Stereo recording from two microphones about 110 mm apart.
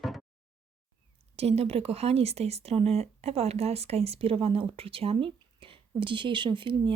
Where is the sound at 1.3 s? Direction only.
70° right (ahead or behind).